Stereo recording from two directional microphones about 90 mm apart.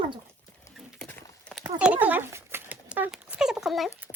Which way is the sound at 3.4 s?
5° right (ahead or behind).